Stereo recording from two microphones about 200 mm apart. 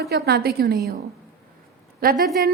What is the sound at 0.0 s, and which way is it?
Speech, 55° right (ahead or behind).